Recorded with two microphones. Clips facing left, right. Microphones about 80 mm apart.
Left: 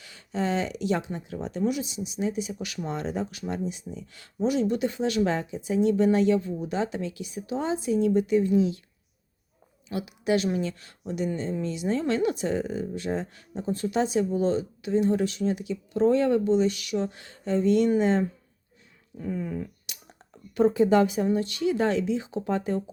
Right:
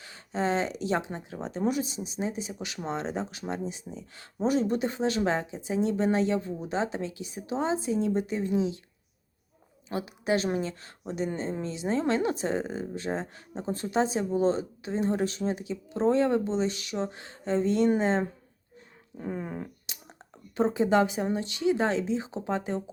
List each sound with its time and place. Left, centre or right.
0.0 s speech: right
9.9 s speech: right
19.2 s a sound: right
20.6 s speech: right